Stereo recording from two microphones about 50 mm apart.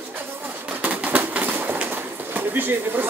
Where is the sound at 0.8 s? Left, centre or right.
Right.